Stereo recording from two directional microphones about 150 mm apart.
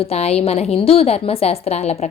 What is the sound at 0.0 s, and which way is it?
A woman's voice, 45° left (ahead or behind).